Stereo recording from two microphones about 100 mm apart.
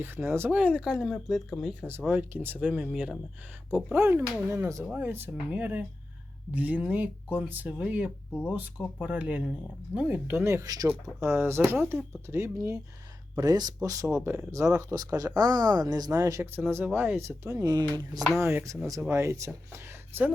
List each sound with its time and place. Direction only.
0.0 s speech: 20° right (ahead or behind); by 1.9 s 5° right (ahead or behind)
1.9 s speech: 20° right (ahead or behind)
3.9 s speech: 25° right (ahead or behind)
11.0 s speech: 25° right (ahead or behind)
18.2 s speech: centre (ahead or behind)
18.4 s speech: 30° right (ahead or behind)